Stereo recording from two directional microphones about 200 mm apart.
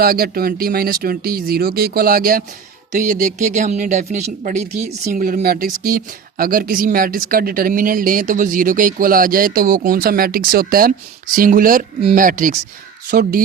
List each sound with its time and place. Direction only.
0.0 s speech: 50° right (ahead or behind)